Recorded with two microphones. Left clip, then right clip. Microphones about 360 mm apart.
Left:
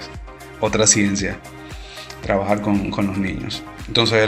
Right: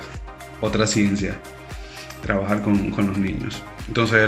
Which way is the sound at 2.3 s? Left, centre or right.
Centre.